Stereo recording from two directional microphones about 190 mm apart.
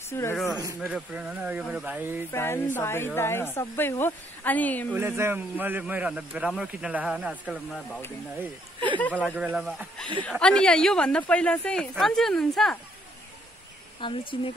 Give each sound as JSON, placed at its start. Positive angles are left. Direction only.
{"t": 0.1, "sound": "speech", "side_deg": 15}
{"t": 0.7, "sound": "a woman's voice", "side_deg": -5}
{"t": 2.3, "sound": "speech", "side_deg": 10}
{"t": 4.9, "sound": "speech", "side_deg": -10}
{"t": 9.1, "sound": "a woman's voice", "side_deg": -5}
{"t": 14.0, "sound": "speech", "side_deg": 25}